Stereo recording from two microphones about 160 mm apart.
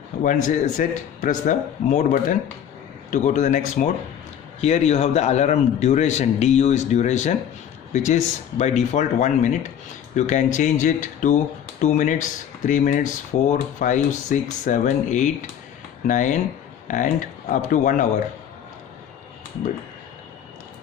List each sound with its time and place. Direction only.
0.2 s speech: 50° left (ahead or behind)